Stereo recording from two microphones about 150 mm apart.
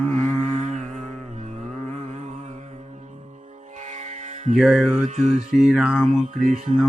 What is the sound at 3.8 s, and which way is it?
Music, 55° right (ahead or behind).